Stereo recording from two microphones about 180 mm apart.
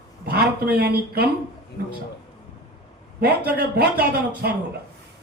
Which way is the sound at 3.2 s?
60° right (ahead or behind).